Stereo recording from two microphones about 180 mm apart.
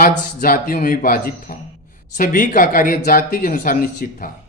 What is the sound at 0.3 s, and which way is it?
Speech, 50° left (ahead or behind).